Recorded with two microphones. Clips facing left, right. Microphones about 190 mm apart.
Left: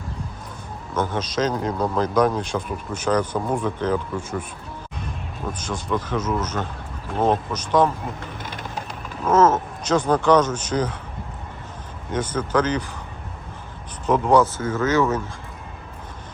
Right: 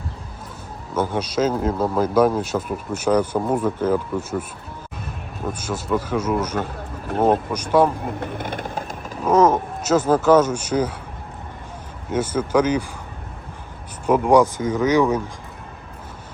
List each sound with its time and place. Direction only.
0.9 s speech: 10° right (ahead or behind)
5.5 s speech: 10° right (ahead or behind)
8.2 s vehicle: 55° right (ahead or behind)
9.2 s speech: 15° right (ahead or behind)
12.1 s speech: 10° right (ahead or behind)
14.1 s speech: 10° right (ahead or behind)